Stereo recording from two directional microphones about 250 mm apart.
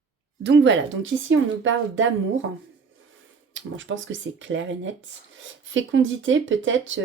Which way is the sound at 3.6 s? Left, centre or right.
Right.